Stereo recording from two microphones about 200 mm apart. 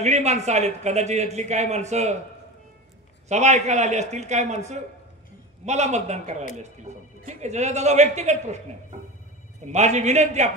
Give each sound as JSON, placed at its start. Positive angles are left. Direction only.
{"t": 0.0, "sound": "a man's voice", "side_deg": -35}
{"t": 3.3, "sound": "a man's voice", "side_deg": -35}
{"t": 9.7, "sound": "a man's voice", "side_deg": -35}